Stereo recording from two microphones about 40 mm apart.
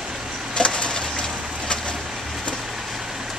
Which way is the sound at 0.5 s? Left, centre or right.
Left.